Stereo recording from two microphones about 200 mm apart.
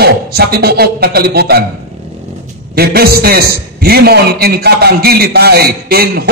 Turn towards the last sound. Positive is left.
turn(degrees=-50)  # may be behind; listen again after turning